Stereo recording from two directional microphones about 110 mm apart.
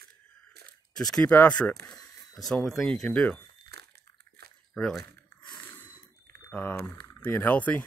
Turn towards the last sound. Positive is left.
turn(degrees=15)  # may be behind; listen again after turning